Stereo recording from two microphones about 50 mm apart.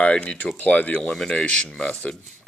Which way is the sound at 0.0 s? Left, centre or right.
Left.